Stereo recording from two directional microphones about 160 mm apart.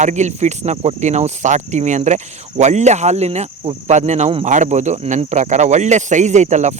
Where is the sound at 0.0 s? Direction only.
45° right (ahead or behind).